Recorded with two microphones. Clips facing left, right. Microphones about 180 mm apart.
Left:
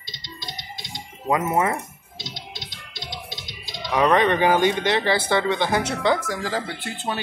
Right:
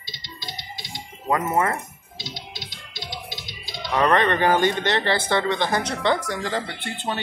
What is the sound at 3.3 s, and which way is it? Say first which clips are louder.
Music: right 1 dB; 20° left (ahead or behind).